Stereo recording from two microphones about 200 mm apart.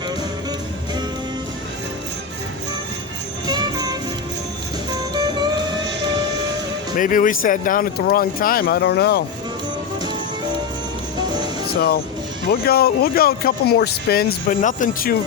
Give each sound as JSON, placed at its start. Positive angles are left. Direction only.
{"t": 3.4, "sound": "music", "side_deg": -20}
{"t": 5.1, "sound": "music", "side_deg": -20}
{"t": 7.0, "sound": "speech", "side_deg": 40}
{"t": 12.5, "sound": "speech", "side_deg": 50}